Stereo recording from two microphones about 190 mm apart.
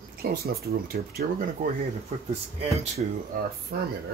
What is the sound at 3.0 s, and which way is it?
Speech, 45° right (ahead or behind).